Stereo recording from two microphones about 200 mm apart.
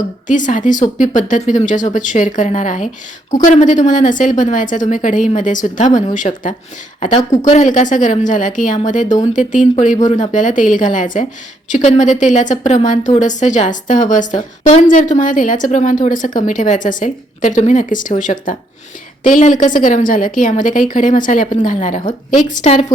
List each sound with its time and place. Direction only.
0.3 s a woman's voice: 40° left (ahead or behind)
7.5 s a woman's voice: 40° left (ahead or behind)